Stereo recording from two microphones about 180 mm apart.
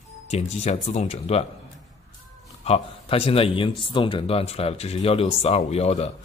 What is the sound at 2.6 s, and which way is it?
Speech, 30° left (ahead or behind).